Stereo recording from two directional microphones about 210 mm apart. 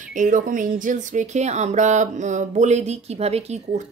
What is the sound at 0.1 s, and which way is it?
A woman's voice, 40° right (ahead or behind).